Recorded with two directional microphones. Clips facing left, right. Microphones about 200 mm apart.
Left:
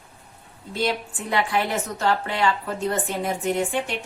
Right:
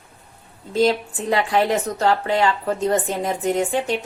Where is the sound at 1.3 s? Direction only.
40° right (ahead or behind).